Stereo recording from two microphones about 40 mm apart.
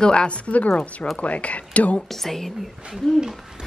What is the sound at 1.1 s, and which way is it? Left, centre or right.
Speech, left.